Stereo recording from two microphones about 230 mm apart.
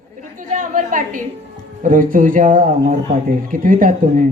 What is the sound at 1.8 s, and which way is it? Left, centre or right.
A woman's voice, right.